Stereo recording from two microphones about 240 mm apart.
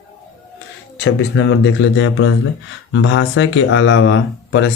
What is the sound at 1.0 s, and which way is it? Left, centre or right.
Speech, left.